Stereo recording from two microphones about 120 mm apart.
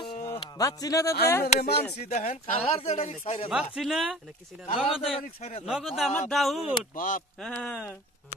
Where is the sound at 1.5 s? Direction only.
65° left (ahead or behind).